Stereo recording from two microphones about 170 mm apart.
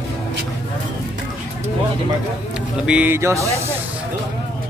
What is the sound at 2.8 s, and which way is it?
Speech, 10° right (ahead or behind).